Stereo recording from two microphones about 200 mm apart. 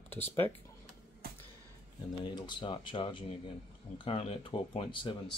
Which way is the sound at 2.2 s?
25° left (ahead or behind).